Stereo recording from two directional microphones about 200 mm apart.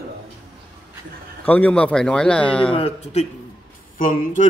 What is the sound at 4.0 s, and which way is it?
Speech, 40° left (ahead or behind).